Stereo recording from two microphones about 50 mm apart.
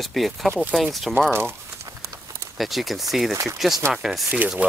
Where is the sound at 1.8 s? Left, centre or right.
Right.